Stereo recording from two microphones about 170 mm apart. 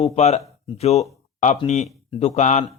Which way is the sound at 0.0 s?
40° left (ahead or behind).